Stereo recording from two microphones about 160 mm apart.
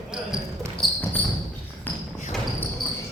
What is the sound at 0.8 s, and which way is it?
Basketball bounce, centre (ahead or behind).